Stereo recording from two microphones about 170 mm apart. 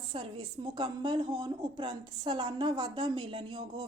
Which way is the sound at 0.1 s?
30° right (ahead or behind).